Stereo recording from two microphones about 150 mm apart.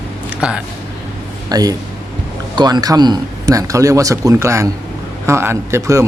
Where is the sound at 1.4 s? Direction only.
25° right (ahead or behind).